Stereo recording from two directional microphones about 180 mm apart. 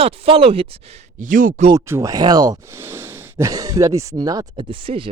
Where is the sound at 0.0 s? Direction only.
35° right (ahead or behind).